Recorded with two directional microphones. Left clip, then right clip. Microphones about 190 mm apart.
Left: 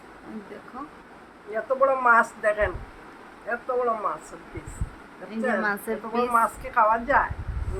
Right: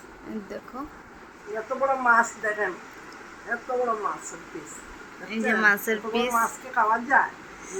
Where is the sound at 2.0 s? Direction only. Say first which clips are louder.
Even; 25° left (ahead or behind).